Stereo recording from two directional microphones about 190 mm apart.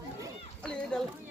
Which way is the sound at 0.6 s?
5° left (ahead or behind).